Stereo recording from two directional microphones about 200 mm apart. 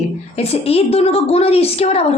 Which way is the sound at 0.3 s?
30° left (ahead or behind).